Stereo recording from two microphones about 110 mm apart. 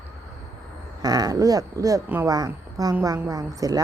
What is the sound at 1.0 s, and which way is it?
A woman's voice, 35° right (ahead or behind).